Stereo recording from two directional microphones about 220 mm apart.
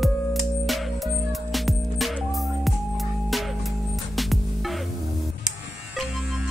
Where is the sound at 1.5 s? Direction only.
Centre (ahead or behind).